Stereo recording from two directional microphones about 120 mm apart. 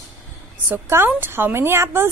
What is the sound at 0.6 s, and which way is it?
A woman's voice, 20° right (ahead or behind).